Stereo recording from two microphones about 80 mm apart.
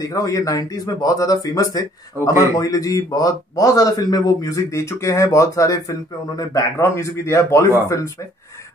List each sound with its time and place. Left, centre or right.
0.1 s speech: left